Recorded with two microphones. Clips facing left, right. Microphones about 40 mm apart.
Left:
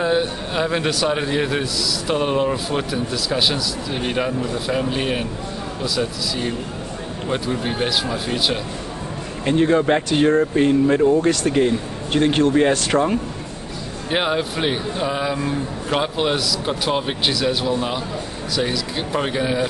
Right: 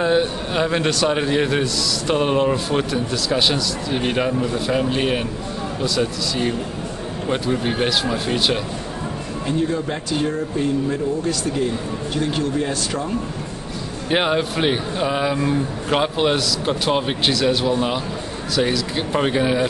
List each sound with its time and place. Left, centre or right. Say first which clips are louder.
0.0 s a man's voice: right 1 dB; centre
9.5 s speech: left 6 dB; left
14.1 s a man's voice: right 2 dB; centre